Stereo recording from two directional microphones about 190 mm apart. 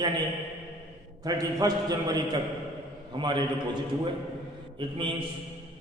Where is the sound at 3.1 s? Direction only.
25° right (ahead or behind).